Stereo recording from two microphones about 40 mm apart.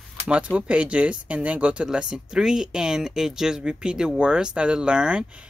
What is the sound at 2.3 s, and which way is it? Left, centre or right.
Speech, centre.